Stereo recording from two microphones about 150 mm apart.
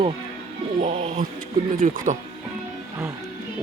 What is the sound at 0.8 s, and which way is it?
Speech, 50° right (ahead or behind).